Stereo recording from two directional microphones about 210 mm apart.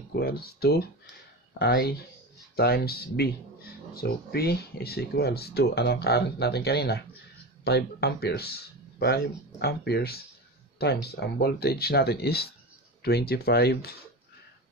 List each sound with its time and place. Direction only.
0.1 s speech: 45° left (ahead or behind)